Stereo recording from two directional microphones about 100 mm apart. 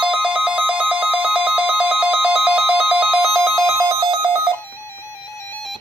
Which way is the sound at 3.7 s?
30° right (ahead or behind).